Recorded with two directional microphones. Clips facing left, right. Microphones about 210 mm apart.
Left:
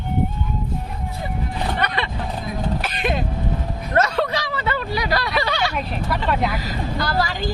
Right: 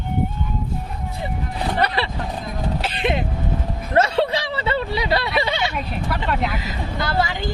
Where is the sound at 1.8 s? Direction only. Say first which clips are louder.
Right 2 dB; 35° right (ahead or behind).